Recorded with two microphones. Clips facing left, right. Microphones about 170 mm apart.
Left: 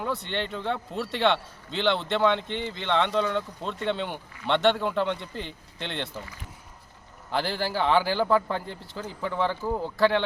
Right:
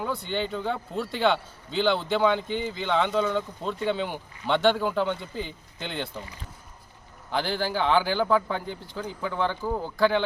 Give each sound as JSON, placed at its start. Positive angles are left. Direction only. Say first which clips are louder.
{"t": 0.0, "sound": "a man's voice", "louder": "right 1 dB", "side_deg": 0}
{"t": 6.1, "sound": "speech", "louder": "even", "side_deg": -20}
{"t": 7.3, "sound": "a man's voice", "louder": "right 1 dB", "side_deg": 0}